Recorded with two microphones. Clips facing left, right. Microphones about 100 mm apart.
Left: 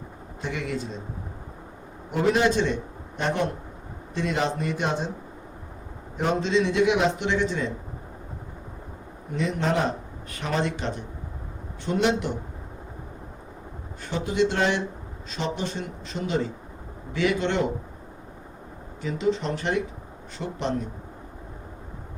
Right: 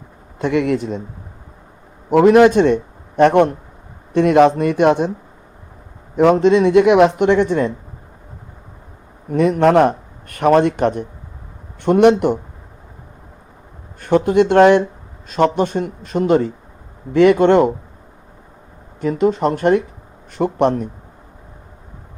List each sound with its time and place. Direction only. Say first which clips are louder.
0.3 s speech: right 13 dB; 60° right (ahead or behind)
2.1 s speech: right 12 dB; 60° right (ahead or behind)
6.1 s speech: right 12 dB; 65° right (ahead or behind)
9.3 s speech: right 13 dB; 55° right (ahead or behind)
14.0 s speech: right 11 dB; 55° right (ahead or behind)
19.0 s speech: right 9 dB; 50° right (ahead or behind)